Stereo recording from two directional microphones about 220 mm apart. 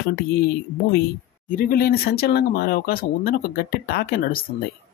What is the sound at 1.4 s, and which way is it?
Speech, 40° left (ahead or behind).